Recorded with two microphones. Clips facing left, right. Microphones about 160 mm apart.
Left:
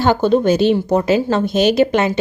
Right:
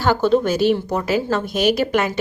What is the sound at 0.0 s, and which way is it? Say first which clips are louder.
Speech: left 3 dB; 20° left (ahead or behind).